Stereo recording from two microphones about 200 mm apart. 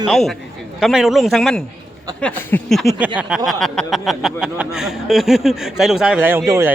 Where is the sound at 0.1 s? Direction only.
Centre (ahead or behind).